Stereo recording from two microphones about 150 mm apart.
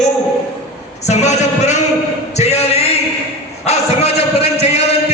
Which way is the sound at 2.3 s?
45° left (ahead or behind).